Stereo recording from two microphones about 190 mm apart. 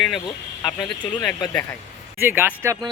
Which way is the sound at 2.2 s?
10° right (ahead or behind).